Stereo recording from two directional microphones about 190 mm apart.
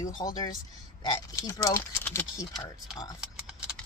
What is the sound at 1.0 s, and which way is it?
Speech, 20° left (ahead or behind).